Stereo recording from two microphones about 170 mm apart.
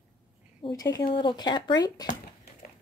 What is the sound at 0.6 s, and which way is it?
Speech, 20° left (ahead or behind).